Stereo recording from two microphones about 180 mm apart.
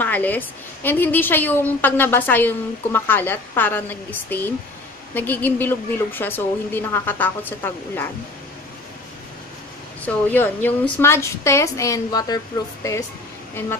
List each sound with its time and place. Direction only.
0.0 s a woman's voice: 10° left (ahead or behind)
5.1 s a woman's voice: 10° left (ahead or behind)
10.0 s a woman's voice: 10° left (ahead or behind)